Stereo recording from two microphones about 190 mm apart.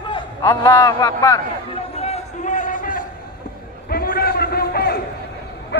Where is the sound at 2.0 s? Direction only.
40° left (ahead or behind); by 5.0 s 55° left (ahead or behind).